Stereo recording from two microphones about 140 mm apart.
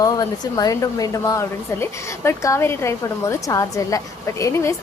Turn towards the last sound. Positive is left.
turn(degrees=20)  # may be behind; listen again after turning